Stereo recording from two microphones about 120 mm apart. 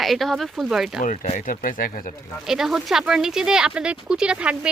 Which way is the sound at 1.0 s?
90° left.